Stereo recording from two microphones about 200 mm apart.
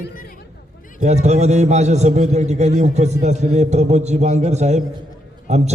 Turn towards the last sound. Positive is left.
turn(degrees=-35)  # may be behind; listen again after turning